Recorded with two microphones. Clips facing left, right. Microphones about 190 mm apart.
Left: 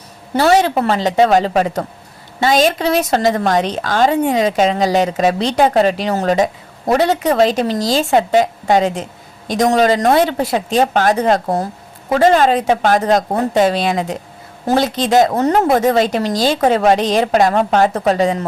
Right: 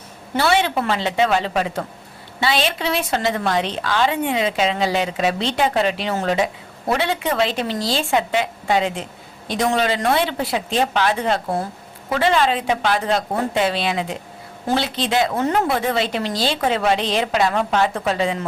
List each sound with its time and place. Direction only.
0.3 s a woman's voice: 40° left (ahead or behind)